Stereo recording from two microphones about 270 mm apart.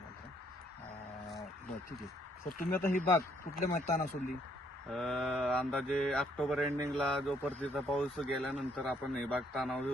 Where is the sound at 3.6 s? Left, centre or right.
Left.